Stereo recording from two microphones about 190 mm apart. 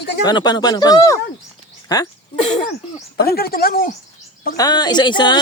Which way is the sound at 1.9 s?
20° left (ahead or behind).